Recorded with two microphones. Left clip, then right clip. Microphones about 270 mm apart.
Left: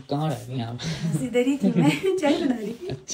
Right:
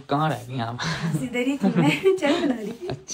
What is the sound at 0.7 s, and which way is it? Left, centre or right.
A man's voice, centre.